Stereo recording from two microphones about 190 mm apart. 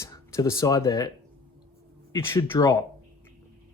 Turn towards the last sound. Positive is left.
turn(degrees=15)  # may be behind; listen again after turning